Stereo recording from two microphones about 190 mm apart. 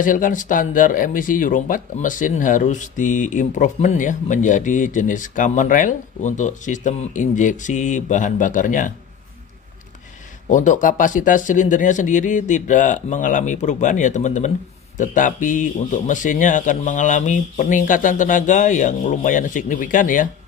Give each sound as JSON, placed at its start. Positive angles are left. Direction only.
{"t": 0.0, "sound": "speech", "side_deg": 45}
{"t": 10.5, "sound": "a man's voice", "side_deg": 40}